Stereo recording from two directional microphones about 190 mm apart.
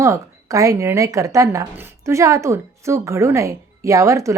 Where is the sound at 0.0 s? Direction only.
15° right (ahead or behind).